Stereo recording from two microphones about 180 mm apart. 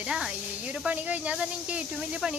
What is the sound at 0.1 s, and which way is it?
Speech, 5° right (ahead or behind).